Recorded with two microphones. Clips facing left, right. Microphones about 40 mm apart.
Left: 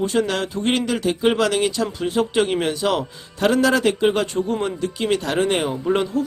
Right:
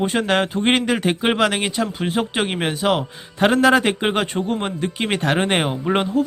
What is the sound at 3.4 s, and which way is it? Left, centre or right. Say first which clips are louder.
Speech: right 2 dB; right.